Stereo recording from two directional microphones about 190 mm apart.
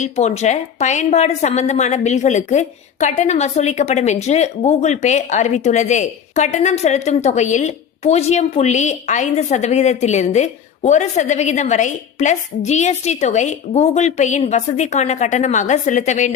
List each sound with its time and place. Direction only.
0.0 s a woman's voice: 35° left (ahead or behind)